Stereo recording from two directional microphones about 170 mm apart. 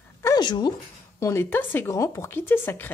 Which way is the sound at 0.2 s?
25° left (ahead or behind).